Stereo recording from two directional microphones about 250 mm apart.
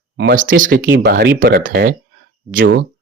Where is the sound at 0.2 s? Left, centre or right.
Right.